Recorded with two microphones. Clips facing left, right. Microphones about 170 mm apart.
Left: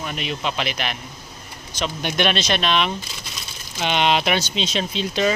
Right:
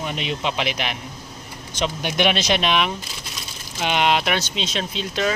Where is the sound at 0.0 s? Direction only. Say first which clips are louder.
Right 1 dB; 20° right (ahead or behind).